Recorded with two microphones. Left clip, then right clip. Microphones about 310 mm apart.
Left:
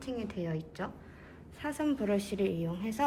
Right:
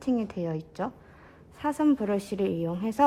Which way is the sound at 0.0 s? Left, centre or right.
Centre.